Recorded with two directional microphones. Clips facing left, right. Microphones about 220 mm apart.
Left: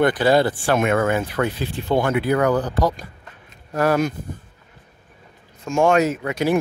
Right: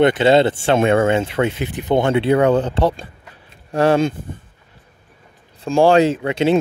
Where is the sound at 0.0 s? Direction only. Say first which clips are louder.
Right 4 dB; 25° right (ahead or behind).